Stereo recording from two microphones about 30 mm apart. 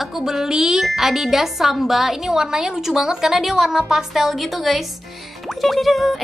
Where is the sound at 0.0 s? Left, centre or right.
Centre.